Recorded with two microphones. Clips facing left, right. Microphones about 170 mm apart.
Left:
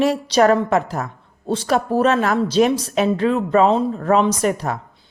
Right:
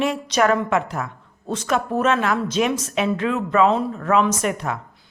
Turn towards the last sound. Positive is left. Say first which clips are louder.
# left 3 dB
turn(degrees=35)  # may be behind; listen again after turning